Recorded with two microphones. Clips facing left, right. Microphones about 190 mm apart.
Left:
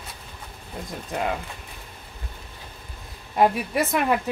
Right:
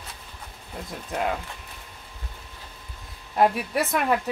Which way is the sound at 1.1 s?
Centre (ahead or behind).